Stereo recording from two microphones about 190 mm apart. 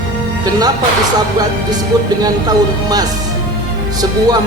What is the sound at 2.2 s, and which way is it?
Speech, 20° right (ahead or behind).